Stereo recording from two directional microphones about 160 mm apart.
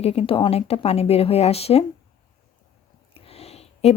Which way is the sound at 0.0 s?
40° left (ahead or behind).